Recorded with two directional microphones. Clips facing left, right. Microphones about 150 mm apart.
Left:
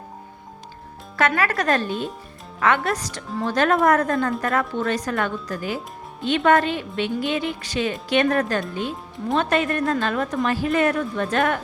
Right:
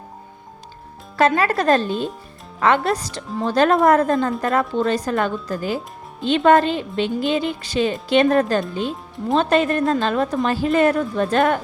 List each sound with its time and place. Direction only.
1.1 s a woman's voice: 25° right (ahead or behind)